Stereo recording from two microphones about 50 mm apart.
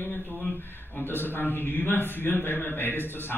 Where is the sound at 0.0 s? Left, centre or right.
Left.